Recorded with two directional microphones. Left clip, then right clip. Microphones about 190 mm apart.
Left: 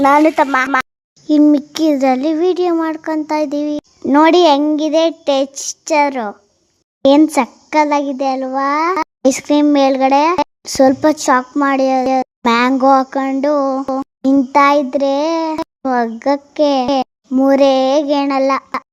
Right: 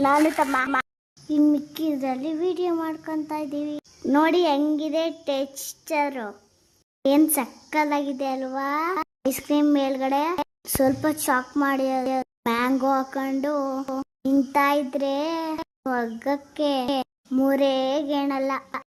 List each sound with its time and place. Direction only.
0.0 s a child's voice: 25° left (ahead or behind)
1.5 s a woman's voice: 40° left (ahead or behind)